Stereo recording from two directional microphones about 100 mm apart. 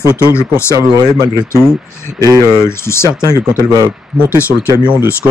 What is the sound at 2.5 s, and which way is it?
Speech, 25° left (ahead or behind).